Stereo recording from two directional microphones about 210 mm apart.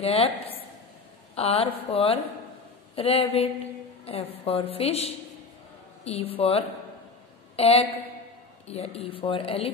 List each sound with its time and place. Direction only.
0.0 s speech: 30° left (ahead or behind)
1.3 s a woman's voice: 30° left (ahead or behind)